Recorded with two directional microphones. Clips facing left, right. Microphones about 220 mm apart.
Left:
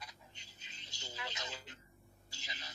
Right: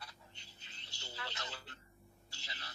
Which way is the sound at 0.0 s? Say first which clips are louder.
Left 1 dB; 15° left (ahead or behind).